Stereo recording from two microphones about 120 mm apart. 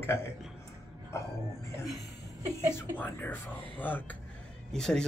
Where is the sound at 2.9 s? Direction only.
15° left (ahead or behind).